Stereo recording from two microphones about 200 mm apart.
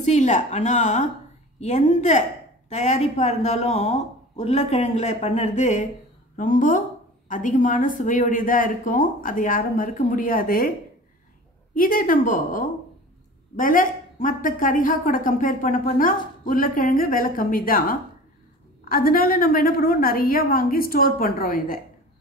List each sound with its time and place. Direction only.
0.0 s speech: 35° left (ahead or behind)
11.7 s speech: 45° left (ahead or behind)